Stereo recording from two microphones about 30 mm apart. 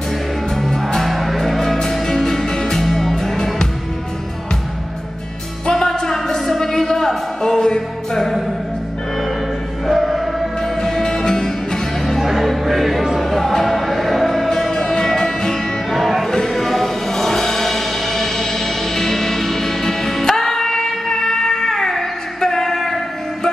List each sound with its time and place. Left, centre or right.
0.6 s music: centre
1.0 s music: centre
1.6 s music: centre
5.7 s music: centre
9.8 s music: centre
10.6 s music: centre
12.2 s music: centre
13.7 s music: centre
14.5 s music: centre
15.9 s music: centre
16.3 s music: centre